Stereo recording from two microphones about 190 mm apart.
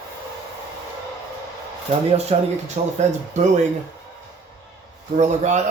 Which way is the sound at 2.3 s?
35° right (ahead or behind).